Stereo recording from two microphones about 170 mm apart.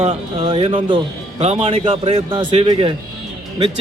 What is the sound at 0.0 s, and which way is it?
A man's voice, 35° right (ahead or behind).